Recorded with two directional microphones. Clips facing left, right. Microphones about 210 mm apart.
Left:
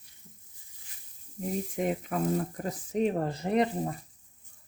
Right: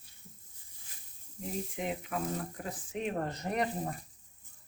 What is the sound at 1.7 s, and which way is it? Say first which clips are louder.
Frying: left 6 dB; 45° left (ahead or behind).